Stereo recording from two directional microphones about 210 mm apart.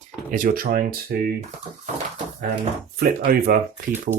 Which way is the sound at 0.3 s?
40° right (ahead or behind).